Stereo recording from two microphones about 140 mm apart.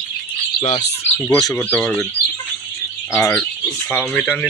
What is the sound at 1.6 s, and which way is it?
Speech, 10° left (ahead or behind).